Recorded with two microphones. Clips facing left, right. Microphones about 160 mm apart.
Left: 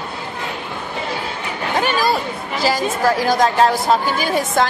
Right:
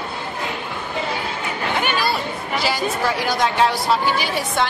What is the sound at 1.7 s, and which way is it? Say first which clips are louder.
Chatter: left 5 dB; 40° left (ahead or behind).